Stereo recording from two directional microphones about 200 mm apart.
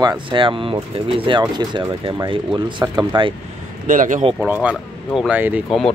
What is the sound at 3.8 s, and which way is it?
Speech, 40° right (ahead or behind).